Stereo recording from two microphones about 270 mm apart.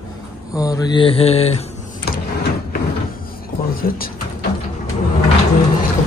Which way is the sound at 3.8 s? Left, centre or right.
Left.